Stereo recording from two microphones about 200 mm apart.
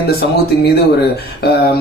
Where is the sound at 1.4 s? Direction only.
50° left (ahead or behind).